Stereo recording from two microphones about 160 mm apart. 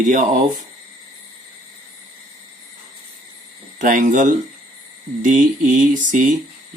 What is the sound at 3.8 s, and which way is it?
Speech, 55° right (ahead or behind).